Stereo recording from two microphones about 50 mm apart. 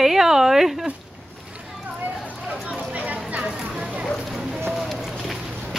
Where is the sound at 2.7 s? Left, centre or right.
Right.